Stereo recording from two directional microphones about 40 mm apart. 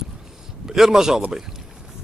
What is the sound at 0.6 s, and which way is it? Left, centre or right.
Speech, centre.